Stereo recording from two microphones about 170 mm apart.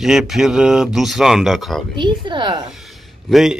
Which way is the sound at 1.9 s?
30° right (ahead or behind).